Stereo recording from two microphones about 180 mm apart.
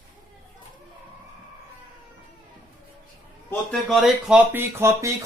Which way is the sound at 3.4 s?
Centre (ahead or behind).